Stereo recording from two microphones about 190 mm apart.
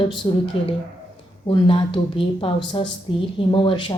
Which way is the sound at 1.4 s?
25° left (ahead or behind).